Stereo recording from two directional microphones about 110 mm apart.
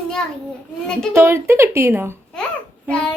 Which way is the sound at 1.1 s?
20° right (ahead or behind).